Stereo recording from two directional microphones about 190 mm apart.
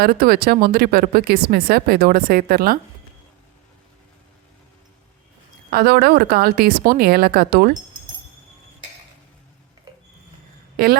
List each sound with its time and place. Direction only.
0.0 s speech: 50° right (ahead or behind)
5.7 s speech: 55° right (ahead or behind)
10.8 s a woman's voice: 55° right (ahead or behind)